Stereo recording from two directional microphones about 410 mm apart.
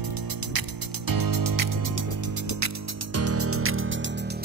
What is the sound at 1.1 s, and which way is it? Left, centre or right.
Music, right.